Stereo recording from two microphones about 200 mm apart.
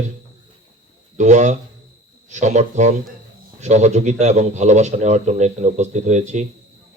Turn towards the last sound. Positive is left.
turn(degrees=-35)  # may be behind; listen again after turning